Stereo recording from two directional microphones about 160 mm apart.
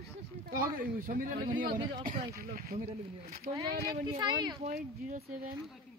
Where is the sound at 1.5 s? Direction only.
30° right (ahead or behind).